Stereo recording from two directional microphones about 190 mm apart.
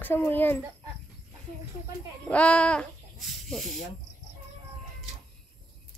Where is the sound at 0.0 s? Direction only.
10° left (ahead or behind).